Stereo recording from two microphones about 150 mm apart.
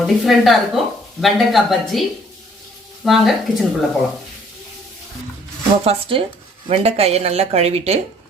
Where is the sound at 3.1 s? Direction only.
Centre (ahead or behind).